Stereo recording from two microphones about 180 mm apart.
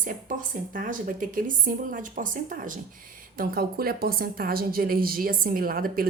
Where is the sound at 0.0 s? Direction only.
50° right (ahead or behind).